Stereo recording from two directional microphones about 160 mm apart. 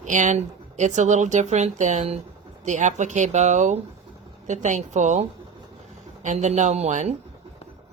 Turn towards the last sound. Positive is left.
turn(degrees=-45)  # may be behind; listen again after turning